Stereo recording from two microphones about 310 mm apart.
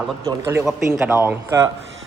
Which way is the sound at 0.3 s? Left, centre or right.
Centre.